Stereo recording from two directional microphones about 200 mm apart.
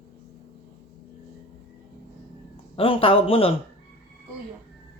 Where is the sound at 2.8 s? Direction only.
25° left (ahead or behind).